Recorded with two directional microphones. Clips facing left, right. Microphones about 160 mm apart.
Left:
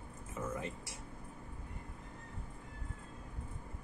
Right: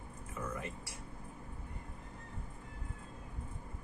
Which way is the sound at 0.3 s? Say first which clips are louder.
Left 2 dB; 25° left (ahead or behind).